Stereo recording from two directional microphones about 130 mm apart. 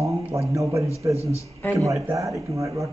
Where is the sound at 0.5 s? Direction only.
25° right (ahead or behind).